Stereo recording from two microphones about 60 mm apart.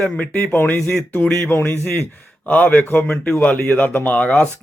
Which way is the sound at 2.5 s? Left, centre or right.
Left.